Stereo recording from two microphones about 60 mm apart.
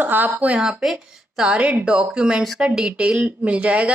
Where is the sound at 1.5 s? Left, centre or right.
Right.